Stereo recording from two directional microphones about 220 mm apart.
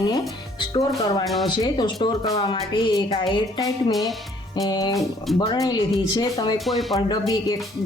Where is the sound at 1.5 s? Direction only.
20° left (ahead or behind).